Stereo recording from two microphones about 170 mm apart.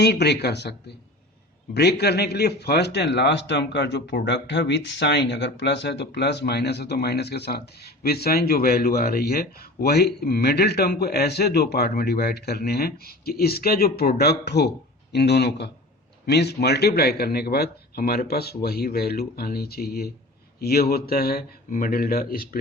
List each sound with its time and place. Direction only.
0.0 s a man's voice: 75° left (ahead or behind); by 22.4 s 60° left (ahead or behind)